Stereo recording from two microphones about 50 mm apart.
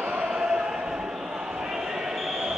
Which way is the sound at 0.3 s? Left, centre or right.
Centre.